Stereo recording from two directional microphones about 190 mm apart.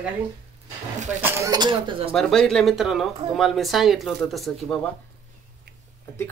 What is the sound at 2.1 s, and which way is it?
Speech, centre (ahead or behind).